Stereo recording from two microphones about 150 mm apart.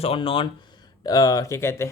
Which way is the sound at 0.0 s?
40° left (ahead or behind).